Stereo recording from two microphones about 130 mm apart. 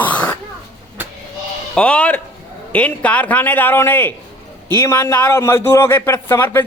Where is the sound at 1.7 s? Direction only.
10° left (ahead or behind).